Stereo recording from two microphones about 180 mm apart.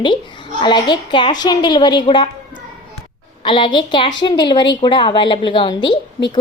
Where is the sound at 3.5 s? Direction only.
25° left (ahead or behind).